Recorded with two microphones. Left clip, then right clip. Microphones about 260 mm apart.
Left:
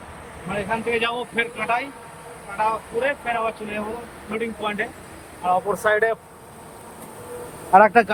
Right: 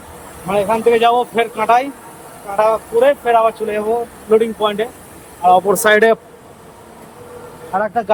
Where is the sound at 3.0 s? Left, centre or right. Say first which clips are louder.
Right 12 dB; centre.